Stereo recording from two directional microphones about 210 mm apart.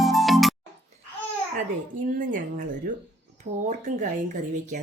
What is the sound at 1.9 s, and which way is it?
Dishes, 40° right (ahead or behind).